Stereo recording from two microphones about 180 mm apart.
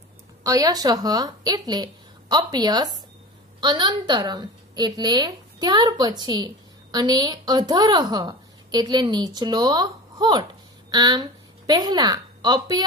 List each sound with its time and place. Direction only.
0.4 s a woman's voice: 20° right (ahead or behind)